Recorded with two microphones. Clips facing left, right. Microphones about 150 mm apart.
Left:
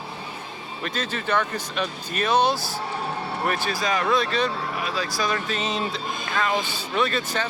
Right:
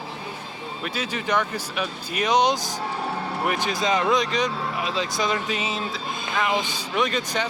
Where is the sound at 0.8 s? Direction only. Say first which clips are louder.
Even; 10° right (ahead or behind).